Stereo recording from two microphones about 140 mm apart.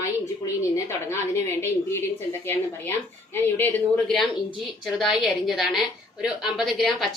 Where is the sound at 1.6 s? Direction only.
20° left (ahead or behind).